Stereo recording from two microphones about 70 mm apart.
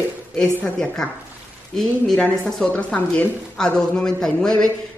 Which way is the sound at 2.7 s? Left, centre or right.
Centre.